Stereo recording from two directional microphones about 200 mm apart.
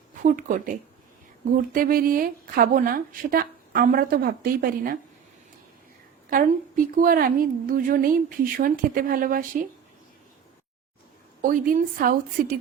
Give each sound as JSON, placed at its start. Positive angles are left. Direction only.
{"t": 0.2, "sound": "speech", "side_deg": -40}
{"t": 6.3, "sound": "speech", "side_deg": -40}
{"t": 11.4, "sound": "speech", "side_deg": -40}